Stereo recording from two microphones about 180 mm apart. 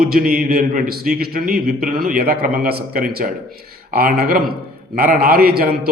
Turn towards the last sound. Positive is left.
turn(degrees=-55)  # may be behind; listen again after turning